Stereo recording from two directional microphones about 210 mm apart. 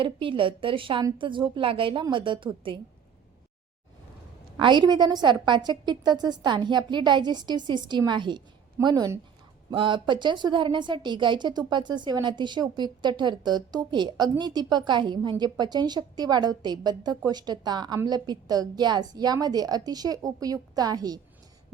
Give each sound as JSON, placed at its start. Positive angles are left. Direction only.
{"t": 0.0, "sound": "a woman's voice", "side_deg": -25}
{"t": 4.5, "sound": "a woman's voice", "side_deg": -20}